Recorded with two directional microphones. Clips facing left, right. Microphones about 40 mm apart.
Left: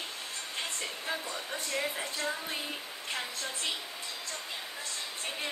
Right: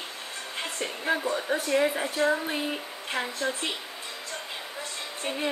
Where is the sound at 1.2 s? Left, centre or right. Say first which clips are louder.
Right 10 dB; right.